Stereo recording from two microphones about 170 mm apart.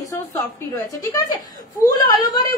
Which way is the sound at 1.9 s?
25° left (ahead or behind).